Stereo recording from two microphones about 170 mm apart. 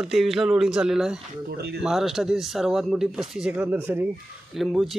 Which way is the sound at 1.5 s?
70° right (ahead or behind).